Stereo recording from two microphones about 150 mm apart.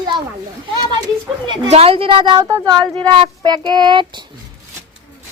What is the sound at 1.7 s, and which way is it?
Speech, 40° right (ahead or behind).